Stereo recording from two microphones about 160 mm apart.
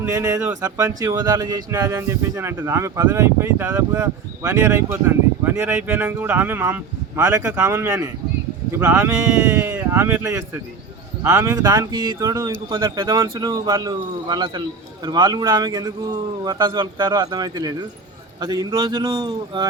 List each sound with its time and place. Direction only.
0.0 s speech: 20° right (ahead or behind)